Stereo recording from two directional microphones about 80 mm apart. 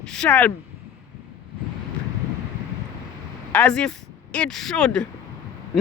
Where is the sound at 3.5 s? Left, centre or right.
Centre.